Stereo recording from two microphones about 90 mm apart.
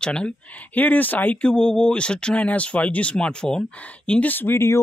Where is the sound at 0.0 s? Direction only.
10° left (ahead or behind).